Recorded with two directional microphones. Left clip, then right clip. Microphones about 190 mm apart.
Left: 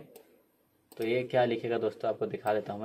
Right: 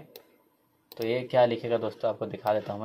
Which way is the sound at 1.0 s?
35° right (ahead or behind).